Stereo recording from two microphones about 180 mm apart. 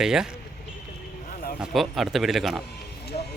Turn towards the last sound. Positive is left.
turn(degrees=40)  # may be behind; listen again after turning